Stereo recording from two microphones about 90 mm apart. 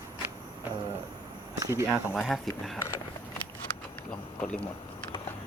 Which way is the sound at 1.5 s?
40° right (ahead or behind).